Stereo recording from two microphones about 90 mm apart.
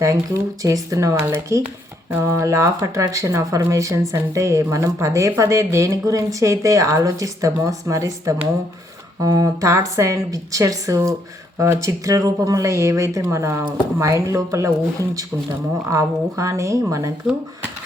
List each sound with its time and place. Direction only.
0.0 s speech: 35° right (ahead or behind)
15.9 s speech: 35° right (ahead or behind)